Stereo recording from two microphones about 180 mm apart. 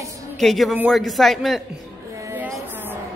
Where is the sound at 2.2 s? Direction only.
15° right (ahead or behind).